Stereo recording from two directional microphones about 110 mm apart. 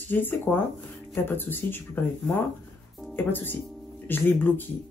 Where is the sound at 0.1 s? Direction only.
15° left (ahead or behind).